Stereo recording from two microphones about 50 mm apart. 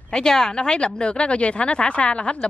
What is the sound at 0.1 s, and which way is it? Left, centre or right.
Speech, centre.